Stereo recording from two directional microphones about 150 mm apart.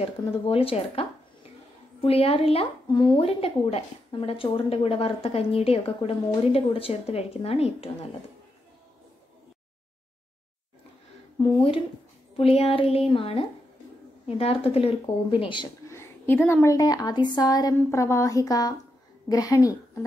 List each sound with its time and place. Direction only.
0.0 s speech: 40° left (ahead or behind)
11.3 s speech: 30° left (ahead or behind)
15.9 s a woman's voice: 15° left (ahead or behind)